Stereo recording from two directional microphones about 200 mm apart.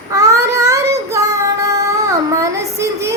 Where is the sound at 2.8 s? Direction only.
15° right (ahead or behind).